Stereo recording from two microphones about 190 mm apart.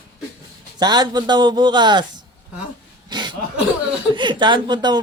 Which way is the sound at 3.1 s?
25° right (ahead or behind).